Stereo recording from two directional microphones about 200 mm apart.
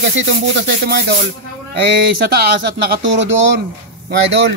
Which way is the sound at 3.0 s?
70° right (ahead or behind).